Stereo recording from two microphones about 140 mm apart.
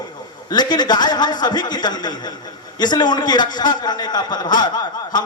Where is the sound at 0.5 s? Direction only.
30° left (ahead or behind).